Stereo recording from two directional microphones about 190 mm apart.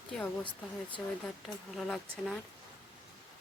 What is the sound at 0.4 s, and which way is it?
Speech, 25° left (ahead or behind).